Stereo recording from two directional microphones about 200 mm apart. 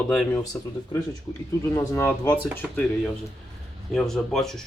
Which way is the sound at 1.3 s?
15° left (ahead or behind).